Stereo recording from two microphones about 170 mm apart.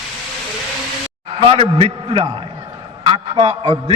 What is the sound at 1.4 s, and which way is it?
A man's voice, 35° right (ahead or behind).